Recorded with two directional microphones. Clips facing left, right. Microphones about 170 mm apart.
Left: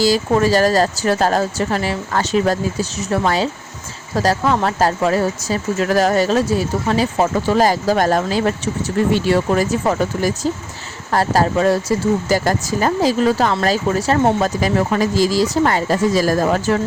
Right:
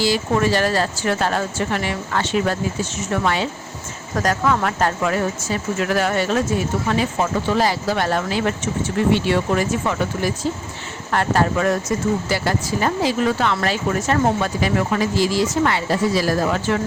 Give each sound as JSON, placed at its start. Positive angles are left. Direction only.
{"t": 0.0, "sound": "speech", "side_deg": 35}